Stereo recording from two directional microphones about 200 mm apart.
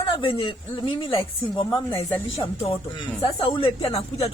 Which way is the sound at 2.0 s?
10° left (ahead or behind).